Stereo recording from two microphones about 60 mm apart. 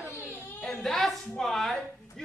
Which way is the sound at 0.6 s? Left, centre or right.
Centre.